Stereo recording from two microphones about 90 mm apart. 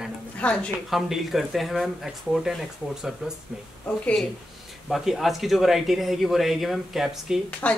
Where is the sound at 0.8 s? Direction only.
Centre (ahead or behind).